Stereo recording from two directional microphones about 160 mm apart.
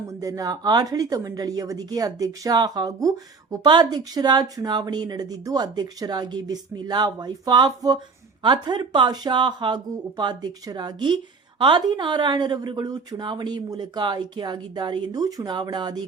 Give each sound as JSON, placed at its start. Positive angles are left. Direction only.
{"t": 0.1, "sound": "a woman's voice", "side_deg": -20}